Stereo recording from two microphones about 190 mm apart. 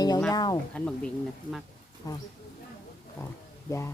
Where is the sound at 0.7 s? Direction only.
5° left (ahead or behind).